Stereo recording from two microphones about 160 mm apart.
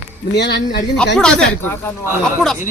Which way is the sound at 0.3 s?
90° left.